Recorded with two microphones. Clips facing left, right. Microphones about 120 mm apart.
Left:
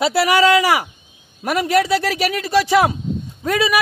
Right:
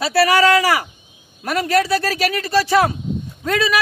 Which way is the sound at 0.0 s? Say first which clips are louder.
Even; 20° left (ahead or behind).